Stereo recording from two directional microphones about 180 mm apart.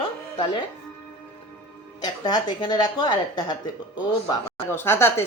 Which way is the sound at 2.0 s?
20° left (ahead or behind).